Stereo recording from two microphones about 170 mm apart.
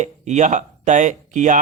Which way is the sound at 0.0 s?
45° right (ahead or behind).